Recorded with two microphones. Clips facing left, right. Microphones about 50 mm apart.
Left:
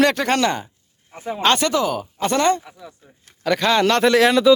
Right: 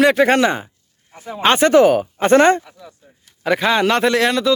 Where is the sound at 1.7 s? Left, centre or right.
Right.